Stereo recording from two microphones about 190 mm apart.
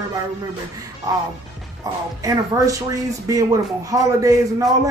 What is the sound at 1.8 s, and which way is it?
A man's voice, 20° right (ahead or behind).